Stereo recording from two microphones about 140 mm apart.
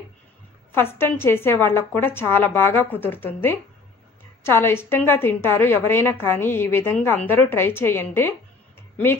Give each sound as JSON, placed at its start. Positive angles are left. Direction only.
{"t": 0.7, "sound": "a woman's voice", "side_deg": 15}